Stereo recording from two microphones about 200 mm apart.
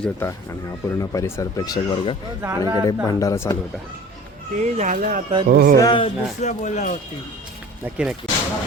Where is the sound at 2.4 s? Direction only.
15° right (ahead or behind).